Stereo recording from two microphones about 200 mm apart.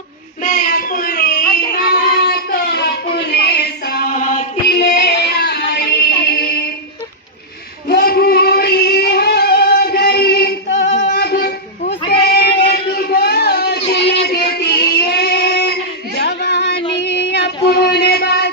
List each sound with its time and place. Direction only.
0.4 s a sound: 40° left (ahead or behind)
4.7 s music: 55° left (ahead or behind)
7.9 s music: 50° left (ahead or behind)
11.1 s child singing: 50° left (ahead or behind)
12.9 s a sound: 50° left (ahead or behind)
14.3 s child singing: 55° left (ahead or behind)